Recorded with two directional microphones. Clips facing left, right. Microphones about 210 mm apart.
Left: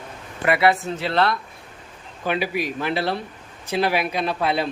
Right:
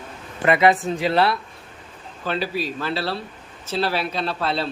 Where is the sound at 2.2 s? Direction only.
15° left (ahead or behind).